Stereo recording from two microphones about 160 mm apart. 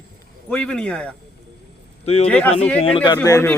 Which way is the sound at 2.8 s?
35° left (ahead or behind).